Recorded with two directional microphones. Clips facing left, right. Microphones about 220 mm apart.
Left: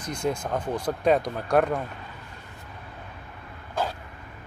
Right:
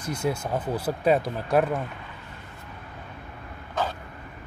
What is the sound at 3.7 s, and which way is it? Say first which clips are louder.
Vehicle: even; 10° left (ahead or behind).